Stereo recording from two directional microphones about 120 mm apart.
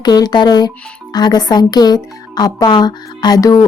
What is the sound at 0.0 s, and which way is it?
Speech, 35° left (ahead or behind).